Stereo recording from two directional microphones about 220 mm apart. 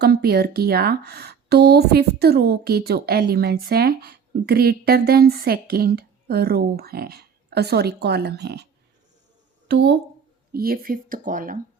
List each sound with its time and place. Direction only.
0.0 s speech: 45° right (ahead or behind)
9.6 s speech: 50° right (ahead or behind)